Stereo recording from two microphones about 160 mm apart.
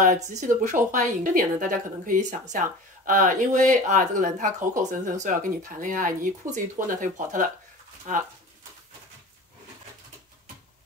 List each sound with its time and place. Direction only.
0.0 s a woman's voice: 50° right (ahead or behind)